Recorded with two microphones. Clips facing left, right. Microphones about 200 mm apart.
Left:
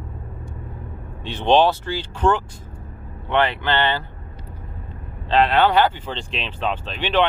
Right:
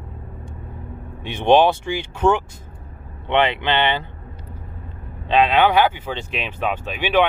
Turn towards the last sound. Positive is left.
turn(degrees=-10)  # may be behind; listen again after turning